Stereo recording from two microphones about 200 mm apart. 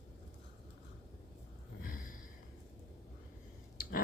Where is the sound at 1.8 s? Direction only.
45° left (ahead or behind).